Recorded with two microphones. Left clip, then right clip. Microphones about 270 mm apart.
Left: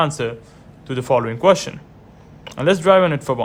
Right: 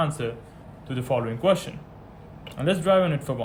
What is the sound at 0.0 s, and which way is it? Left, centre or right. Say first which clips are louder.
Speech: left 7 dB; left.